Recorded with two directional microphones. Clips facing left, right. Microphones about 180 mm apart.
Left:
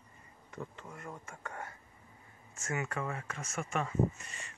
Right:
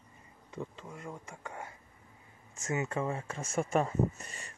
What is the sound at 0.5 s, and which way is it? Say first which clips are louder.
Speech: right 3 dB; 15° right (ahead or behind).